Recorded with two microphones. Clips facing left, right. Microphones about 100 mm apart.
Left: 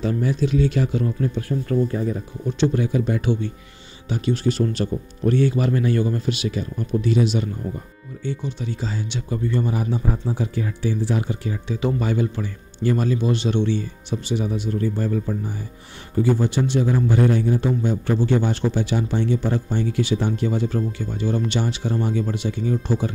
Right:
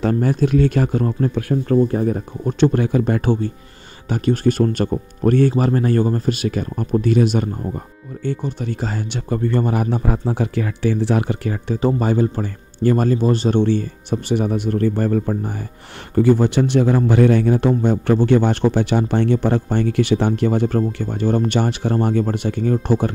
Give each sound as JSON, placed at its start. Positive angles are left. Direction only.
{"t": 0.0, "sound": "a man's voice", "side_deg": -50}
{"t": 11.8, "sound": "a man's voice", "side_deg": -40}